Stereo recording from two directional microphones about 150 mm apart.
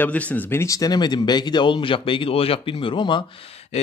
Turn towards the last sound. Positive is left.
turn(degrees=45)  # may be behind; listen again after turning